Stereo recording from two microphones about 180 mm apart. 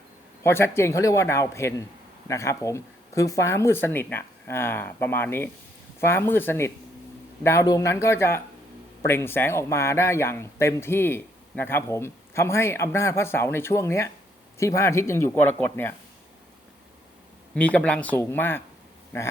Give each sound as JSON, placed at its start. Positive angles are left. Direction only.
{"t": 0.4, "sound": "a man's voice", "side_deg": 15}
{"t": 17.5, "sound": "a man's voice", "side_deg": 10}